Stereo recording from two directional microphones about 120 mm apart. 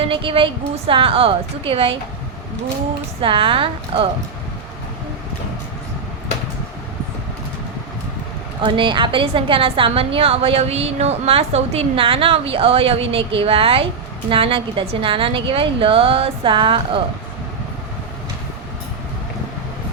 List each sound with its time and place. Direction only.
0.0 s a woman's voice: 45° right (ahead or behind)
3.2 s a woman's voice: 45° right (ahead or behind)
8.6 s a woman's voice: 45° right (ahead or behind)